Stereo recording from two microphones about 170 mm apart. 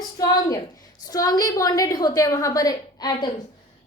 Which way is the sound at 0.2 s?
20° left (ahead or behind).